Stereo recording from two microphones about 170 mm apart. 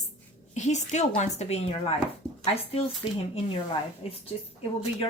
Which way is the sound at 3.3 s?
35° left (ahead or behind).